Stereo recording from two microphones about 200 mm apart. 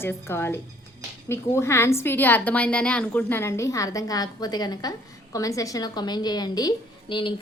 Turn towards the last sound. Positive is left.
turn(degrees=25)  # may be behind; listen again after turning